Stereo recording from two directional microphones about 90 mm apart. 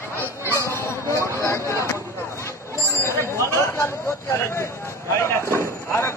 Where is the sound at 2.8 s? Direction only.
30° left (ahead or behind).